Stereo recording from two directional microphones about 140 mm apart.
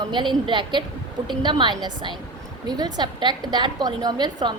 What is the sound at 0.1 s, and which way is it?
A woman's voice, 35° right (ahead or behind).